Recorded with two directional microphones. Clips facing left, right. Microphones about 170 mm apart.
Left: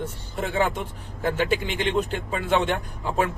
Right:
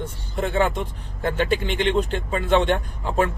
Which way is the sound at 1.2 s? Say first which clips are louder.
Right 1 dB; 5° left (ahead or behind).